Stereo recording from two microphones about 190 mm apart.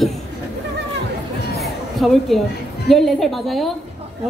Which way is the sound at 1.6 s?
Centre (ahead or behind).